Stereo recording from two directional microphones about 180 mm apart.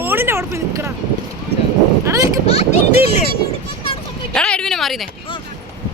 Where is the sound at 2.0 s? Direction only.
20° right (ahead or behind).